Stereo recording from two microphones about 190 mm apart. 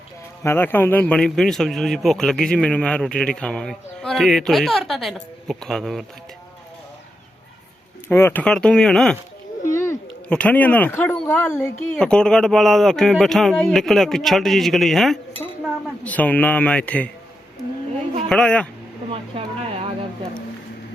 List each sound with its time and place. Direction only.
0.4 s speech: 10° left (ahead or behind)
8.0 s speech: 10° left (ahead or behind)
9.7 s a man's voice: 15° left (ahead or behind)
18.3 s speech: 5° left (ahead or behind)
19.1 s a sound: 30° right (ahead or behind)